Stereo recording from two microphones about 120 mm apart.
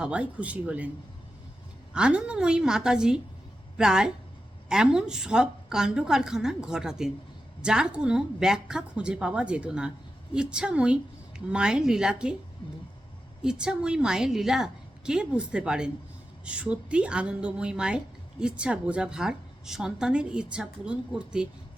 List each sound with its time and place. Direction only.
0.0 s a woman's voice: 10° right (ahead or behind)
1.9 s a woman's voice: 10° right (ahead or behind)
13.4 s a woman's voice: 5° right (ahead or behind)